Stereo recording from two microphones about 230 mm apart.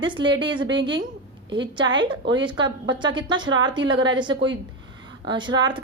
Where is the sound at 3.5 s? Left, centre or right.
Right.